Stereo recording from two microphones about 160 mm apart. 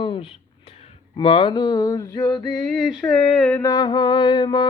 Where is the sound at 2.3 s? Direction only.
5° left (ahead or behind).